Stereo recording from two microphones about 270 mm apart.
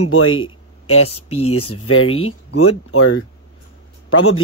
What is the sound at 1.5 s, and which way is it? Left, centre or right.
Speech, left.